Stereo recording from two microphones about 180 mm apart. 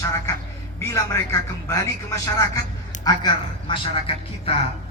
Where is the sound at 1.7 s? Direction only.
20° left (ahead or behind).